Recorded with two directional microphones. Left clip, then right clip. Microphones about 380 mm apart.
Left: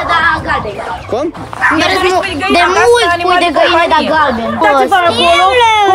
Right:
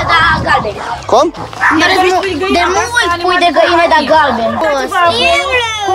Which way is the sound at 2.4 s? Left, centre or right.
Centre.